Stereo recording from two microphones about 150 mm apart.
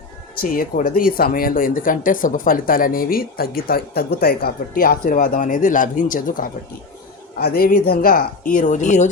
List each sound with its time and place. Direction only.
0.4 s speech: 70° left (ahead or behind)
7.3 s speech: 85° left; by 9.0 s 55° left (ahead or behind)